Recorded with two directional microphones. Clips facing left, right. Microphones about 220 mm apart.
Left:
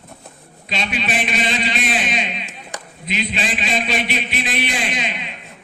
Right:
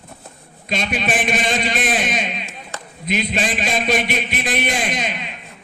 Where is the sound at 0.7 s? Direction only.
50° right (ahead or behind).